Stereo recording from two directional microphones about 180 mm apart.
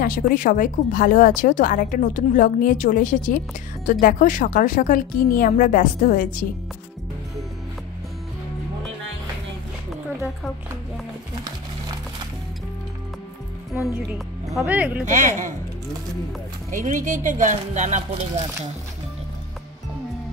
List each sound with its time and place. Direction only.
0.0 s a woman's voice: 50° left (ahead or behind)
13.9 s speech: 5° right (ahead or behind)
15.0 s speech: 45° right (ahead or behind)
16.7 s speech: 45° right (ahead or behind)